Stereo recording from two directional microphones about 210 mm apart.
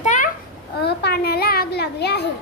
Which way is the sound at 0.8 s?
50° left (ahead or behind).